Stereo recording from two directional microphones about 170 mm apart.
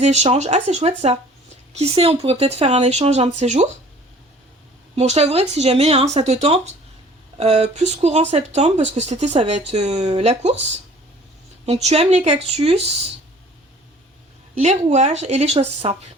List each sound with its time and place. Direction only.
0.0 s speech: 40° right (ahead or behind)
4.9 s speech: 40° right (ahead or behind)
14.5 s speech: 40° right (ahead or behind)